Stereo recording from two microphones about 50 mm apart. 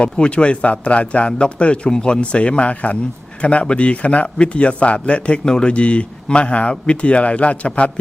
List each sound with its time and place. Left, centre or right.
0.0 s speech: left